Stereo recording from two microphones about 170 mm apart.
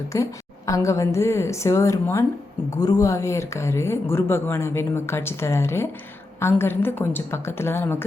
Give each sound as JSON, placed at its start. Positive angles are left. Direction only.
{"t": 0.1, "sound": "a woman's voice", "side_deg": 20}